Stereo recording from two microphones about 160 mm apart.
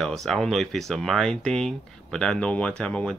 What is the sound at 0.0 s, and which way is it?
Speech, centre (ahead or behind).